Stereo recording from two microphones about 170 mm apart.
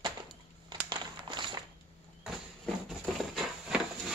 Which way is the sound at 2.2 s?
Centre (ahead or behind).